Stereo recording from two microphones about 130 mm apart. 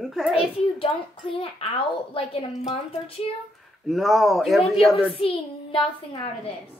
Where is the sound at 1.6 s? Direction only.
50° left (ahead or behind).